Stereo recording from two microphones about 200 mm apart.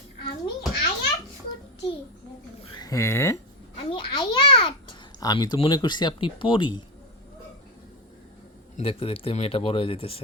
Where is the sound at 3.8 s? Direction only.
25° left (ahead or behind).